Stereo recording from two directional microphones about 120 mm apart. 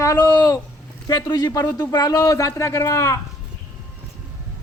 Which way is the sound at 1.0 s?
35° left (ahead or behind).